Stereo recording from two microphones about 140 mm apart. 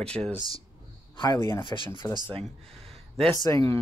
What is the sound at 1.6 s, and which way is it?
Speech, 35° left (ahead or behind).